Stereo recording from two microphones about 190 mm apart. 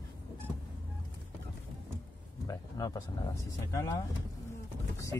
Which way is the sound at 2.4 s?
20° left (ahead or behind).